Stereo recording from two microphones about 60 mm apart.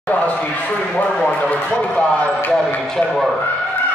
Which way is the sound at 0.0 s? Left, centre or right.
Left.